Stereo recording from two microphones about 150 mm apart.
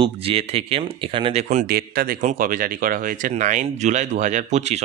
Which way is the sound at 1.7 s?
90° right.